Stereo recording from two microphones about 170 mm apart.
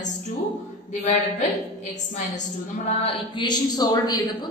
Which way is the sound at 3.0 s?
30° left (ahead or behind).